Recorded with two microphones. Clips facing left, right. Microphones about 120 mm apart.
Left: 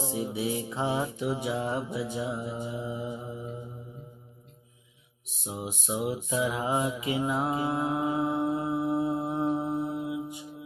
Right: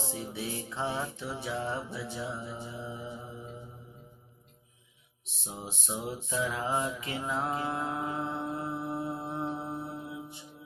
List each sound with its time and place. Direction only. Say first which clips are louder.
0.0 s mantra: left 6 dB; 15° left (ahead or behind)
5.5 s mantra: left 5 dB; 10° left (ahead or behind)